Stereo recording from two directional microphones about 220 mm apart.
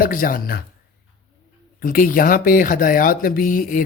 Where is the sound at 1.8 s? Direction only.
40° left (ahead or behind).